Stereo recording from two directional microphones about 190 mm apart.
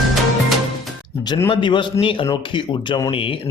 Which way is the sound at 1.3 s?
25° left (ahead or behind).